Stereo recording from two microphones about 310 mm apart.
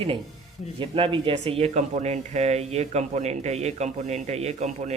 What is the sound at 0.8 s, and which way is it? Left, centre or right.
Speech, centre.